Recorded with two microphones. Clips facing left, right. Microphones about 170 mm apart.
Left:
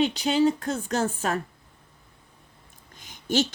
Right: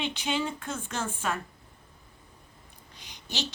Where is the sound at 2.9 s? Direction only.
50° left (ahead or behind).